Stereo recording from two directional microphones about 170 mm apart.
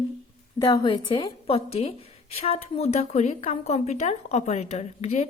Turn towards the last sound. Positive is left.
turn(degrees=40)  # may be behind; listen again after turning